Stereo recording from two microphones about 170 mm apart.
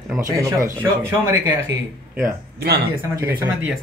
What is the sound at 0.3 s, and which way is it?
Speech, 20° right (ahead or behind).